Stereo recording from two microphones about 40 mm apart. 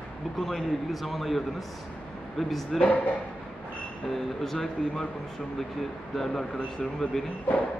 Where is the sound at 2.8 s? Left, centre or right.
Left.